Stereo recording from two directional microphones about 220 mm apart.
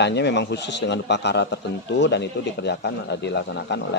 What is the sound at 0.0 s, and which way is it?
A man's voice, 50° left (ahead or behind).